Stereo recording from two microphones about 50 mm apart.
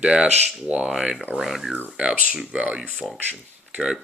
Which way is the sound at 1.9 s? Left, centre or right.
Right.